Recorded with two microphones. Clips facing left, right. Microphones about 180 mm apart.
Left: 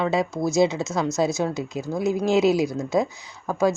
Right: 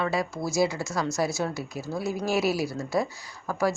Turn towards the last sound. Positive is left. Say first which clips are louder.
# left 5 dB
turn(degrees=20)  # may be behind; listen again after turning